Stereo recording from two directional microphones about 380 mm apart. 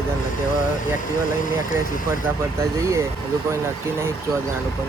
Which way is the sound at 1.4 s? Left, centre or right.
Left.